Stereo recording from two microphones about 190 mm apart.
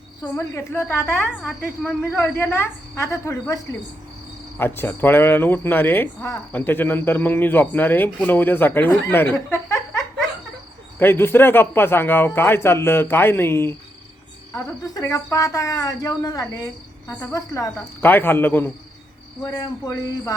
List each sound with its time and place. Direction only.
0.2 s speech: 15° left (ahead or behind)
2.0 s speech: 10° left (ahead or behind)
11.0 s speech: 10° left (ahead or behind)